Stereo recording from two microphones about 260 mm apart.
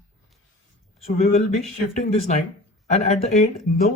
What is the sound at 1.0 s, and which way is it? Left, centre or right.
Speech, left.